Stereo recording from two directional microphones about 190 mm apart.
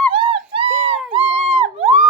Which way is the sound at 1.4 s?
35° right (ahead or behind).